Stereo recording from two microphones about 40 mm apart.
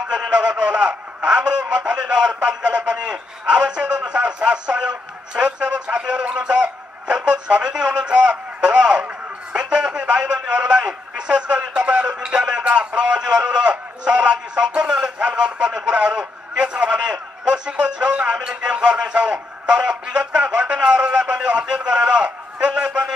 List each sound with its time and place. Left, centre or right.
0.1 s a man's voice: right